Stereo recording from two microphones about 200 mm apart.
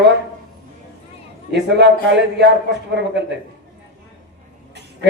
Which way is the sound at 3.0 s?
60° right (ahead or behind).